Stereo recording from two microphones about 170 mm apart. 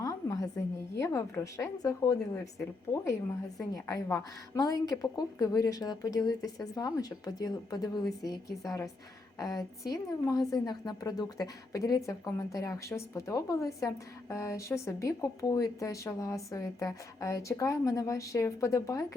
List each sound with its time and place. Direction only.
0.0 s a woman's voice: 20° left (ahead or behind)
9.4 s speech: 20° left (ahead or behind)